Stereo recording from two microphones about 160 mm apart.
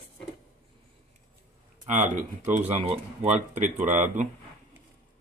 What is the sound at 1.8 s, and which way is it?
Speech, 50° right (ahead or behind).